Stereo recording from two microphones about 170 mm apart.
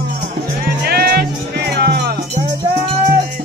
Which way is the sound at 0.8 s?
65° right (ahead or behind).